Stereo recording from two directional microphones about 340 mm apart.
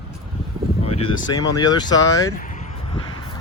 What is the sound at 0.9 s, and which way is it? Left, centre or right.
Speech, centre.